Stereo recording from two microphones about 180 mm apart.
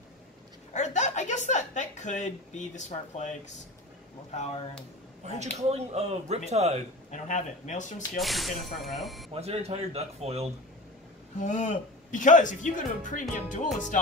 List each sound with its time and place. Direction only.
0.7 s a woman's voice: 40° left (ahead or behind)
4.3 s a woman's voice: 35° left (ahead or behind)
5.2 s speech: 40° right (ahead or behind)
7.1 s speech: 40° left (ahead or behind)
8.2 s speech: centre (ahead or behind)
9.3 s speech: 35° right (ahead or behind)
11.3 s speech: 40° left (ahead or behind)